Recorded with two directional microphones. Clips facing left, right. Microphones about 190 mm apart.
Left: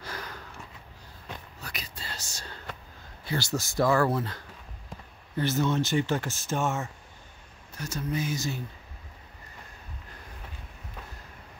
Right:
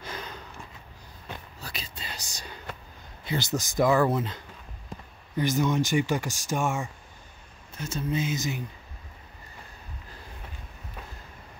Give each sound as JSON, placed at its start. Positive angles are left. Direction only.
{"t": 0.0, "sound": "a sound", "side_deg": -20}
{"t": 1.6, "sound": "whispering", "side_deg": -30}
{"t": 2.0, "sound": "whispering", "side_deg": -15}
{"t": 3.3, "sound": "speech", "side_deg": -20}
{"t": 7.7, "sound": "speech", "side_deg": -25}